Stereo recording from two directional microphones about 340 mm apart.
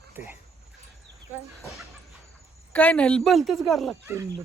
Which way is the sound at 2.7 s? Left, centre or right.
Centre.